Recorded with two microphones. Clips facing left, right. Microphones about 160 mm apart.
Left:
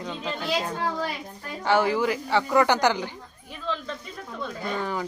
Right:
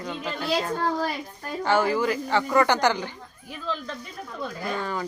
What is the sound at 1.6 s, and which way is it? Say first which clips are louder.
Speech: even; 15° left (ahead or behind).